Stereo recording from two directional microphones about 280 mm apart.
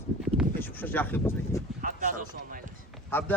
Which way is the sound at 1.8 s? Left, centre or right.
Right.